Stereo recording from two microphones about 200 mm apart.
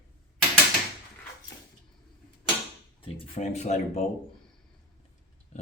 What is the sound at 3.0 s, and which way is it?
Speech, 30° left (ahead or behind).